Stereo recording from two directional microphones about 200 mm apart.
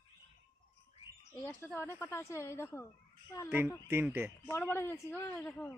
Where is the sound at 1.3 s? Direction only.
10° left (ahead or behind).